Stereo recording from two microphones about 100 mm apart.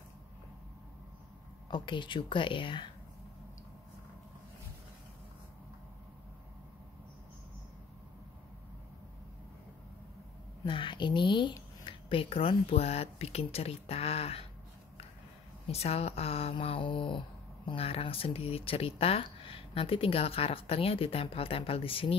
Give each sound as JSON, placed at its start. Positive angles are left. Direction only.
{"t": 1.7, "sound": "speech", "side_deg": 55}
{"t": 10.6, "sound": "speech", "side_deg": 55}
{"t": 15.7, "sound": "speech", "side_deg": 90}
{"t": 17.6, "sound": "speech", "side_deg": 75}